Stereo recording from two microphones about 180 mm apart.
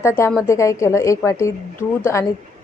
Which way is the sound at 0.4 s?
15° left (ahead or behind).